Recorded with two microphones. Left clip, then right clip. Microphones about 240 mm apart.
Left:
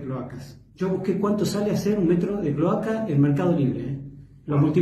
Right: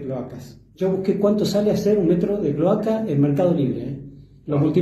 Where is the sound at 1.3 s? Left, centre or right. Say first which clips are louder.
Right 5 dB; left.